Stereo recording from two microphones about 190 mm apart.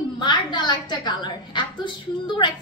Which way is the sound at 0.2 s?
25° left (ahead or behind).